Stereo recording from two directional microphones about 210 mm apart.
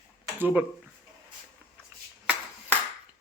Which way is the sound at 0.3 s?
10° right (ahead or behind).